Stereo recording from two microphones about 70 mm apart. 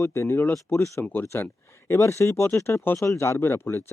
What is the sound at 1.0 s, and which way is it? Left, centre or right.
Speech, left.